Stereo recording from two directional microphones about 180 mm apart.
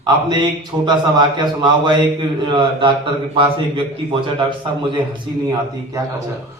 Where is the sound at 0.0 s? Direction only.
25° right (ahead or behind).